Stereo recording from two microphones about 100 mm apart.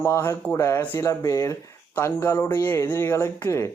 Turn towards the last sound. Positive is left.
turn(degrees=30)  # may be behind; listen again after turning